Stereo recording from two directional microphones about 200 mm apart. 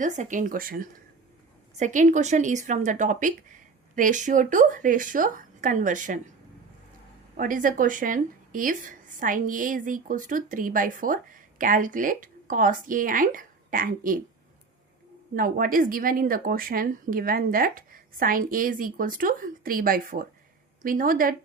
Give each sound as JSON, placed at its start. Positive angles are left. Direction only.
{"t": 0.0, "sound": "a woman's voice", "side_deg": -40}
{"t": 7.3, "sound": "a woman's voice", "side_deg": -40}
{"t": 15.4, "sound": "a woman's voice", "side_deg": -45}